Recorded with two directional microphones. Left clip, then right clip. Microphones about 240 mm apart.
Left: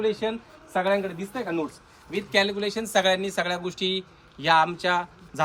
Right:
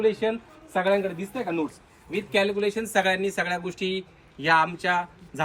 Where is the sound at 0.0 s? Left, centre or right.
Centre.